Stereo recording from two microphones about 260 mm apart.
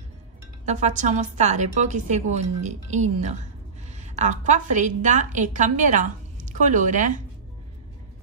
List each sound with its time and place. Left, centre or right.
0.7 s a woman's voice: right